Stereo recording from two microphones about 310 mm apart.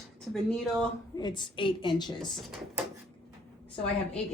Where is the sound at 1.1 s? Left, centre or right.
Centre.